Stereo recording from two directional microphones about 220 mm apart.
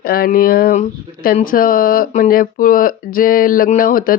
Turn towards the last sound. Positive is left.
turn(degrees=40)  # may be behind; listen again after turning